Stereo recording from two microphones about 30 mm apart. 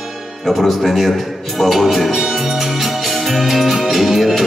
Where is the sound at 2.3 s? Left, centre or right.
Centre.